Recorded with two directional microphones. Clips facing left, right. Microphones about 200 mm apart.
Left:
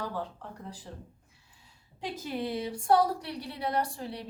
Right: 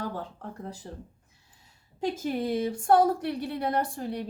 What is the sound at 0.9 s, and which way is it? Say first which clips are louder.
A woman's voice: right 3 dB; 40° right (ahead or behind).